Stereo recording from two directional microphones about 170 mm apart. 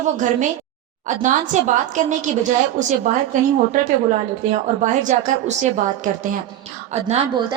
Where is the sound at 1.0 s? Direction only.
45° right (ahead or behind).